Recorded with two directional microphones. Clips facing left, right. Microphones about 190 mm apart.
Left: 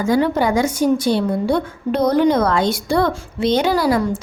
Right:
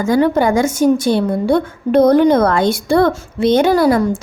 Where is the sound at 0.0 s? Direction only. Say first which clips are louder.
Right 3 dB; 50° right (ahead or behind).